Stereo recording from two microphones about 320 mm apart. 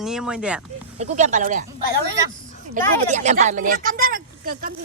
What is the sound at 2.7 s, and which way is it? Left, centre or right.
Speech, right.